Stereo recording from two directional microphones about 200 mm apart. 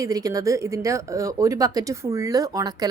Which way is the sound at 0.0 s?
15° right (ahead or behind).